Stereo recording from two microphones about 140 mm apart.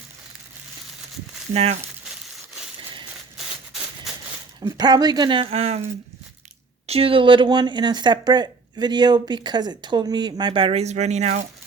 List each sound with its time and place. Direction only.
1.5 s speech: 50° right (ahead or behind)
3.3 s a sound: centre (ahead or behind)
4.6 s speech: 30° right (ahead or behind); by 11.4 s 55° right (ahead or behind)